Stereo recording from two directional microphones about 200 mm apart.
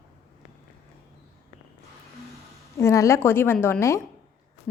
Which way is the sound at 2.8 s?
15° left (ahead or behind).